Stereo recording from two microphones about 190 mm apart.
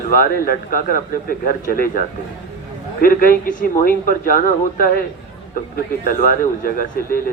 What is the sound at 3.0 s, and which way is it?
Speech, 50° left (ahead or behind).